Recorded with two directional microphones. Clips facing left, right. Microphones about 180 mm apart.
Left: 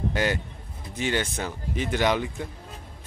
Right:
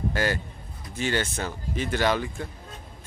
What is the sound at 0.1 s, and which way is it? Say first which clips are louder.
Speech: left 1 dB; 20° left (ahead or behind).